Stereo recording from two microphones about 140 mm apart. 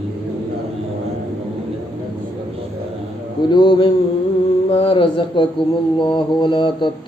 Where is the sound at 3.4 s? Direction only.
35° left (ahead or behind).